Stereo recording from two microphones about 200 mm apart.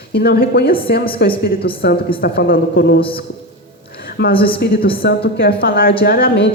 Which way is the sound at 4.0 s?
50° left (ahead or behind).